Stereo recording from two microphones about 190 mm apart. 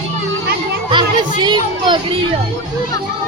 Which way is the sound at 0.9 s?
25° right (ahead or behind).